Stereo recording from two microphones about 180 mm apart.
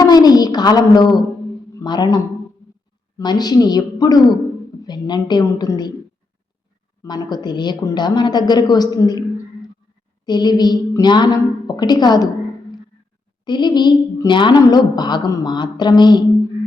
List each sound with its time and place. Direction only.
0.0 s a sound: 20° left (ahead or behind)
1.7 s a woman's voice: 25° left (ahead or behind)
7.0 s a woman's voice: 20° left (ahead or behind)
13.4 s a woman's voice: 25° left (ahead or behind)